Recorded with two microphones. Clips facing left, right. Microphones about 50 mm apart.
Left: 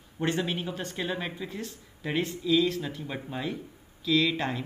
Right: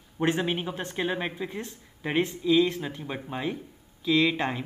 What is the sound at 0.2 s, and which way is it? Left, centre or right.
Speech, right.